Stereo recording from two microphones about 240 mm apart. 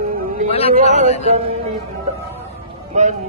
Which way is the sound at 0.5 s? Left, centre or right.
Left.